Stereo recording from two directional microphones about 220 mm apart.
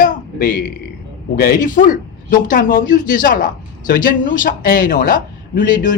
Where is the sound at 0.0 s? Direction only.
40° left (ahead or behind).